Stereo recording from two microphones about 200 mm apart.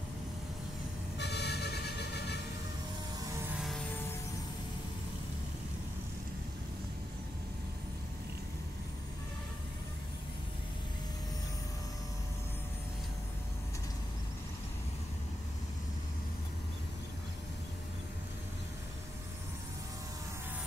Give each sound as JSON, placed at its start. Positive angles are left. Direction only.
{"t": 1.1, "sound": "vehicle", "side_deg": 55}
{"t": 3.5, "sound": "vehicle", "side_deg": 0}